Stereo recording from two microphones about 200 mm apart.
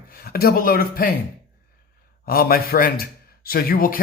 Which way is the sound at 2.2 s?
50° left (ahead or behind).